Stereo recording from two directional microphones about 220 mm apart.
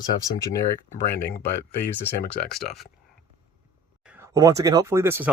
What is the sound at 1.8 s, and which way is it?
Speech, 10° left (ahead or behind).